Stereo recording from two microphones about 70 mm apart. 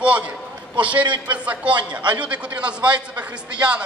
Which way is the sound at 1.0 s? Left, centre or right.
Right.